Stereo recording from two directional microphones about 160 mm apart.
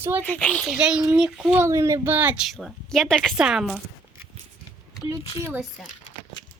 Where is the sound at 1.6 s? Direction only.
20° right (ahead or behind).